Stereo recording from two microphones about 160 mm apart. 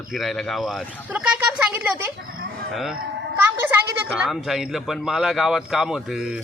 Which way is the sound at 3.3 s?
15° right (ahead or behind).